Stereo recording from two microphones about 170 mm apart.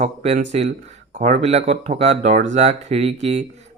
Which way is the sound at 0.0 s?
40° right (ahead or behind).